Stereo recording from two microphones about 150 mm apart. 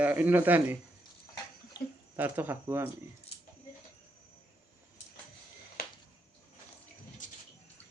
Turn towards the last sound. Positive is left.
turn(degrees=55)  # may be behind; listen again after turning